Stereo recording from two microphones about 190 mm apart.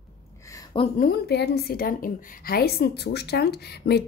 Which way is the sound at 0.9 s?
55° left (ahead or behind).